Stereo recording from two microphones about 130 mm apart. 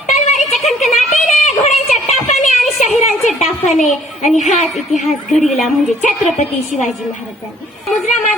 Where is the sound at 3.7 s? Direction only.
70° left (ahead or behind).